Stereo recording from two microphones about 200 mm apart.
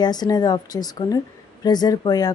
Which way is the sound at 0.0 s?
20° left (ahead or behind).